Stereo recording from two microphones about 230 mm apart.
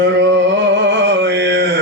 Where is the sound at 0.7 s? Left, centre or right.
Right.